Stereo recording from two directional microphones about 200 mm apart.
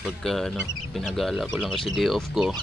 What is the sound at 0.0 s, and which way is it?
Speech, centre (ahead or behind).